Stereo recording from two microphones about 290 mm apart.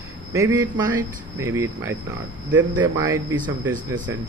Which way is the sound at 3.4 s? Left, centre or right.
Right.